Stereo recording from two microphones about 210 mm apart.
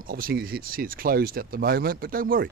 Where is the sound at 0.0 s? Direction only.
45° right (ahead or behind).